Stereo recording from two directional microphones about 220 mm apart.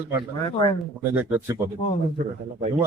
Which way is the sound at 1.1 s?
10° right (ahead or behind).